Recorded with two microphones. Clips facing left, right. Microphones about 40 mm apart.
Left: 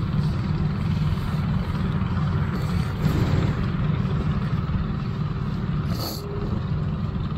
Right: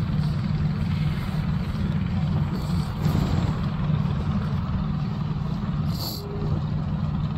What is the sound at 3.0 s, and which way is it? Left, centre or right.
Vehicle, centre.